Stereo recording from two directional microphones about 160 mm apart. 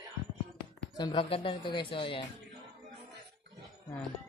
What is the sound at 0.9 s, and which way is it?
Speech, 30° left (ahead or behind).